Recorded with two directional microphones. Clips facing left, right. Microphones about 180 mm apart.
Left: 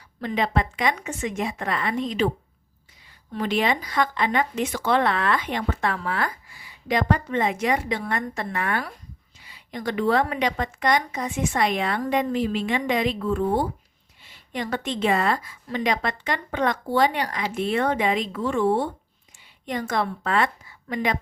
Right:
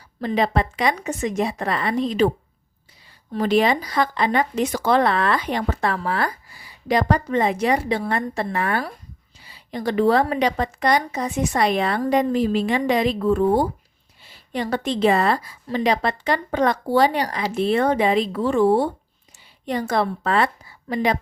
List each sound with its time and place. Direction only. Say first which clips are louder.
0.2 s speech: right 3 dB; 35° right (ahead or behind)
3.3 s speech: right 5 dB; 40° right (ahead or behind)